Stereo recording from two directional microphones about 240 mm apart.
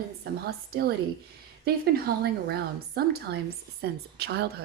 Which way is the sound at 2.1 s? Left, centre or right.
Right.